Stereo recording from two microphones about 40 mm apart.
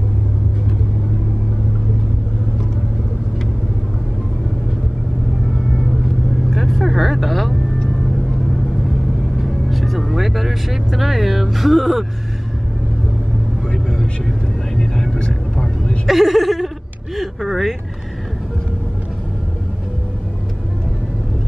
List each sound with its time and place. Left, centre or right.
6.5 s vehicle: centre
9.5 s music: centre
14.8 s vehicle: centre
16.1 s a sound: centre